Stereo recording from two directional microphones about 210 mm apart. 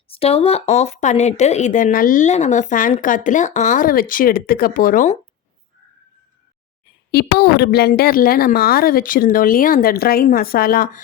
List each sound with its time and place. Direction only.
0.1 s speech: 30° left (ahead or behind)
7.1 s a woman's voice: 50° left (ahead or behind)